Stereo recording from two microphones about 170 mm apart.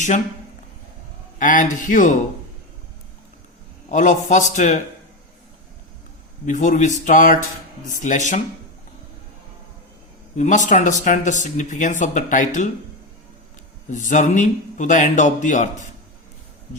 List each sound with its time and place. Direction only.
1.4 s speech: 50° left (ahead or behind)
3.8 s speech: 45° left (ahead or behind)
6.4 s speech: 50° left (ahead or behind)
10.3 s speech: 45° left (ahead or behind)
13.9 s speech: 45° left (ahead or behind)